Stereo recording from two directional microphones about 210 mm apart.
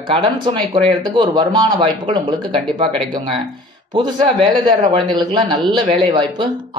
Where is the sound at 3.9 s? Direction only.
20° right (ahead or behind).